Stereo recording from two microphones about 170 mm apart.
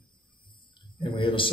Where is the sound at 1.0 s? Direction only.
30° left (ahead or behind).